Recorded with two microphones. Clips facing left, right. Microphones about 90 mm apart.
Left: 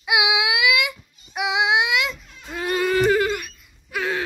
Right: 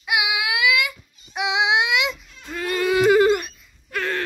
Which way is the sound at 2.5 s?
20° left (ahead or behind).